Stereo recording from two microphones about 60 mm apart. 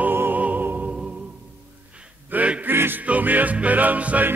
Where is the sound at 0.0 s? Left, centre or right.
Right.